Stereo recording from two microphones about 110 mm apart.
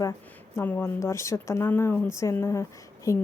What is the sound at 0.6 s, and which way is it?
Speech, 20° left (ahead or behind).